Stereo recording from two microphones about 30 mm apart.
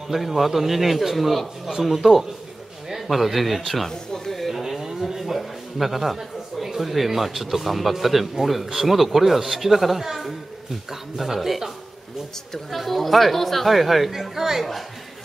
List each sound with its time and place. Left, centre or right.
0.1 s a man's voice: centre
3.9 s a sound: centre
4.4 s cattle: centre
5.0 s a sound: centre
6.6 s a man's voice: centre
12.7 s a man's voice: centre